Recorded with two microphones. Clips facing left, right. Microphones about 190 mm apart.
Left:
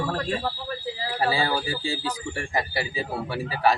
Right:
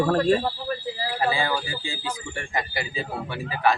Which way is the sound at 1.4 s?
35° left (ahead or behind).